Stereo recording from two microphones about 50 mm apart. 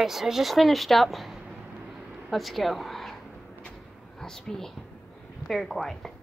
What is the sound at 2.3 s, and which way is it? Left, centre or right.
Speech, centre.